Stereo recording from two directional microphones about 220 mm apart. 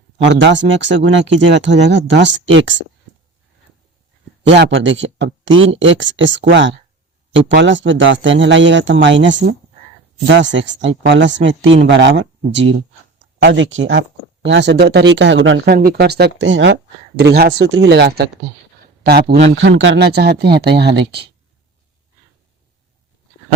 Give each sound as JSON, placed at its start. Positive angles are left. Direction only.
{"t": 0.2, "sound": "speech", "side_deg": -55}
{"t": 4.4, "sound": "speech", "side_deg": -55}
{"t": 15.7, "sound": "speech", "side_deg": -45}
{"t": 17.2, "sound": "speech", "side_deg": -45}
{"t": 19.5, "sound": "speech", "side_deg": -55}